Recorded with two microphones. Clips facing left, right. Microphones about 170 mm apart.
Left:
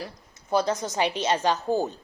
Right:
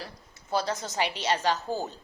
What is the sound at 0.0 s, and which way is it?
A woman's voice, 20° left (ahead or behind).